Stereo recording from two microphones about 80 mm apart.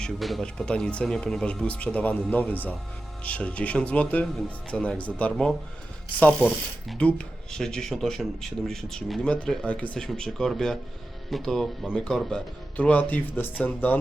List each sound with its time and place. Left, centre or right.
0.0 s speech: centre
0.4 s speech: centre
7.0 s speech: centre
12.7 s speech: centre